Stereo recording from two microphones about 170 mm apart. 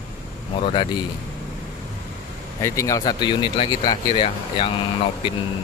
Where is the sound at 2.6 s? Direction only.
20° left (ahead or behind).